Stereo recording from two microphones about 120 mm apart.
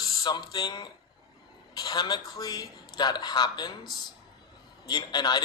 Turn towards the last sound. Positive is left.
turn(degrees=35)  # may be behind; listen again after turning